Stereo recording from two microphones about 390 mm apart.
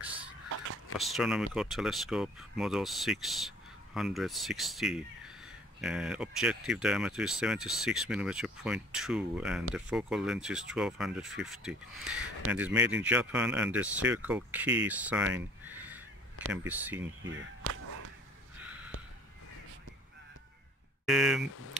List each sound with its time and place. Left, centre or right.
0.9 s speech: centre
17.0 s speech: right
18.6 s a sound: centre
21.0 s speech: centre